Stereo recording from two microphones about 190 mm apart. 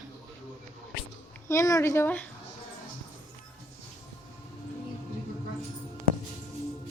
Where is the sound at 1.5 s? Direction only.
15° left (ahead or behind).